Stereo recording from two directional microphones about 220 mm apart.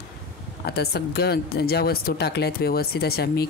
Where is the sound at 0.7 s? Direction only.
45° left (ahead or behind).